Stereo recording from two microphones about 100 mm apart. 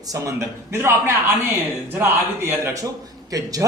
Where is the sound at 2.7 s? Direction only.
35° right (ahead or behind).